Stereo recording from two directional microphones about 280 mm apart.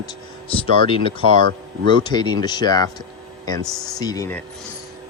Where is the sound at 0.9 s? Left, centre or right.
Centre.